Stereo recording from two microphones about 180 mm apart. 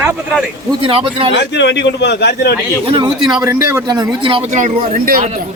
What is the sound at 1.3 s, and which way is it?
A man's voice, 70° left (ahead or behind).